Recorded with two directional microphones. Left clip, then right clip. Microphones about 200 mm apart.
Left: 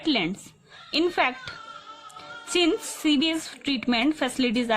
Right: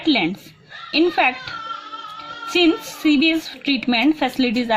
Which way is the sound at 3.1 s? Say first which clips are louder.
Right 7 dB; 35° left (ahead or behind).